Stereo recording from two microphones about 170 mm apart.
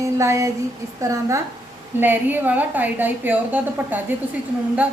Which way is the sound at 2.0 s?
10° right (ahead or behind).